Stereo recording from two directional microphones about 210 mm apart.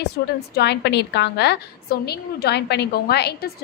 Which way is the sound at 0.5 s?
50° left (ahead or behind).